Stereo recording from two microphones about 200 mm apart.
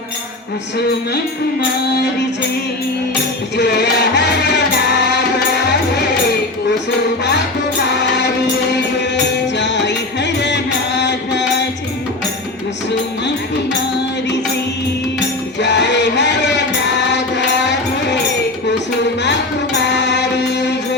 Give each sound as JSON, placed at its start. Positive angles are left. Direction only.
{"t": 3.6, "sound": "music", "side_deg": 55}
{"t": 7.9, "sound": "music", "side_deg": 60}
{"t": 9.6, "sound": "music", "side_deg": 60}
{"t": 15.6, "sound": "music", "side_deg": 60}
{"t": 19.2, "sound": "music", "side_deg": 60}